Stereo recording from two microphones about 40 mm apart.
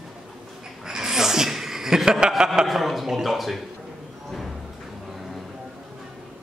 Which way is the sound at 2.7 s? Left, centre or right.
Centre.